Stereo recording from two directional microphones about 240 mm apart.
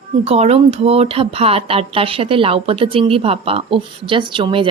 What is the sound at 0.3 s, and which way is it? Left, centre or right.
A woman's voice, right.